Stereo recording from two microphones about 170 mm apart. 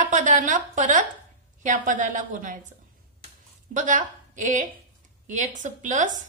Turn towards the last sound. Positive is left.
turn(degrees=-45)  # may be behind; listen again after turning